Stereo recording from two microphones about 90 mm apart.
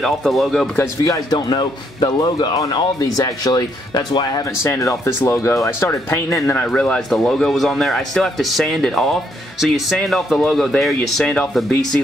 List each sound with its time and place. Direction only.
0.0 s speech: centre (ahead or behind)
0.7 s speech: 40° left (ahead or behind)
1.5 s speech: 50° left (ahead or behind)
4.6 s speech: 30° left (ahead or behind)
6.6 s speech: 15° left (ahead or behind)